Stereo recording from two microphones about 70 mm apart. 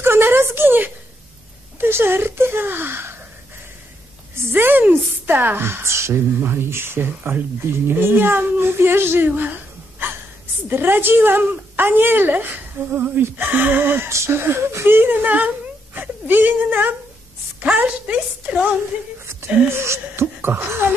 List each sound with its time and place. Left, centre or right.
0.0 s a sound: right
1.8 s speech: right
4.5 s a woman's voice: right
9.3 s a sound: right
10.7 s a woman's voice: right
19.7 s a woman's voice: right